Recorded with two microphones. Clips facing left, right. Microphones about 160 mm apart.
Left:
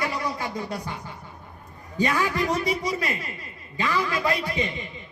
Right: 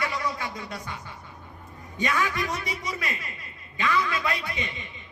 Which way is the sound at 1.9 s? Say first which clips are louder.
Left 3 dB; 30° left (ahead or behind).